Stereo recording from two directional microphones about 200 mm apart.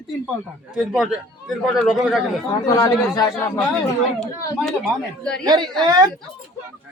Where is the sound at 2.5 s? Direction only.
15° left (ahead or behind).